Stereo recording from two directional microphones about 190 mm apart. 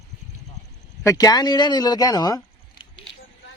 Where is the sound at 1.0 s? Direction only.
20° left (ahead or behind).